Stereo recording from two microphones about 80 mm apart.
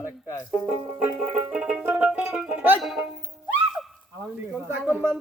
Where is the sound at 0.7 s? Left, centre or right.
Centre.